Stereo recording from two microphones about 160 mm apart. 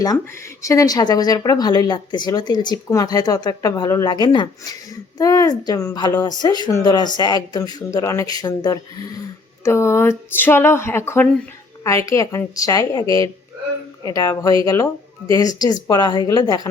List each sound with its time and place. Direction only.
0.6 s speech: 20° left (ahead or behind)